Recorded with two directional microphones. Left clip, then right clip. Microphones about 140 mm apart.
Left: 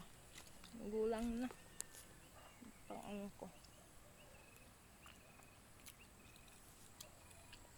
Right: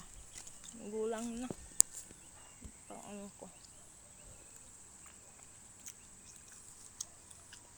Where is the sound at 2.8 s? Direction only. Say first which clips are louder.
Right 1 dB; 10° left (ahead or behind).